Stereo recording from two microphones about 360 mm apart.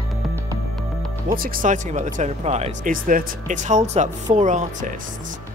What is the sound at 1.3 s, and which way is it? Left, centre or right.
Speech, right.